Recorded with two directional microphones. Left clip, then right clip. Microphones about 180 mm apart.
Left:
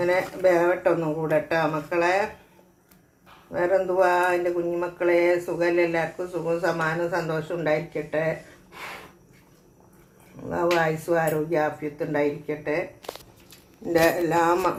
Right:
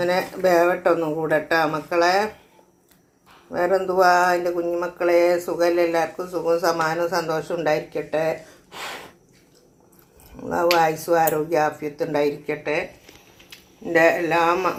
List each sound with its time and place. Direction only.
0.0 s speech: 25° right (ahead or behind)
3.5 s speech: 25° right (ahead or behind)
10.5 s speech: 25° right (ahead or behind)
13.8 s a man's voice: 5° right (ahead or behind)